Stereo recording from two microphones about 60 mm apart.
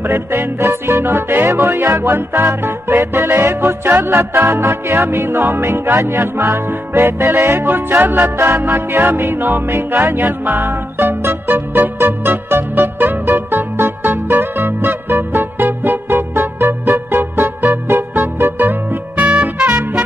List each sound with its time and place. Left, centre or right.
0.0 s music: right
10.1 s music: right
13.0 s music: right
15.6 s music: right
17.6 s music: right
18.4 s music: right